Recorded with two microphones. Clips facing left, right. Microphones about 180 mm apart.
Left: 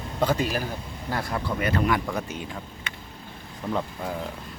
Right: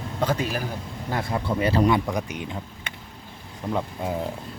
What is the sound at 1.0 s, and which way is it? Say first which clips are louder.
Speech: right 2 dB; 20° right (ahead or behind).